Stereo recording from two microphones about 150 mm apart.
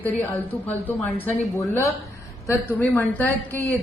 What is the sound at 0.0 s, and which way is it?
A woman's voice, 10° left (ahead or behind).